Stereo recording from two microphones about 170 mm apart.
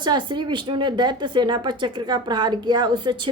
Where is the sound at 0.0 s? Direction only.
25° right (ahead or behind).